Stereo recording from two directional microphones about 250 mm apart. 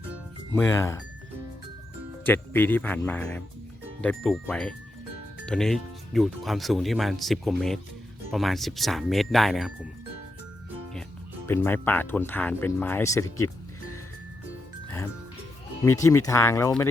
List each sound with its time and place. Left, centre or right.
0.5 s speech: centre
2.2 s speech: centre
11.4 s speech: centre
14.8 s music: centre
15.8 s speech: centre